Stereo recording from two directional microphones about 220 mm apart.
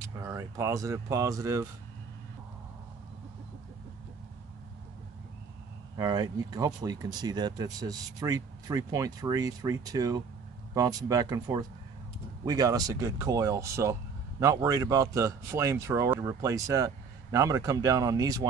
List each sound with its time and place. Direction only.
0.2 s speech: 15° right (ahead or behind)
5.9 s speech: 15° right (ahead or behind)